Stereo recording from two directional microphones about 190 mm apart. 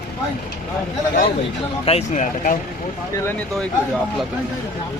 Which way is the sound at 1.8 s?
35° left (ahead or behind).